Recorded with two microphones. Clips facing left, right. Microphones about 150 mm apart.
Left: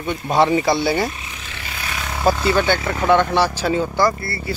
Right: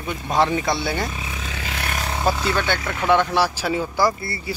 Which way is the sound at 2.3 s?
5° left (ahead or behind).